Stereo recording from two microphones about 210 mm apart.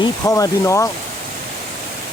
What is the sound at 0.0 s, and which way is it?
Speech, 15° left (ahead or behind).